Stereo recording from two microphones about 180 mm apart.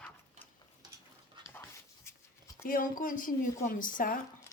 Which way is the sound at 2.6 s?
50° left (ahead or behind).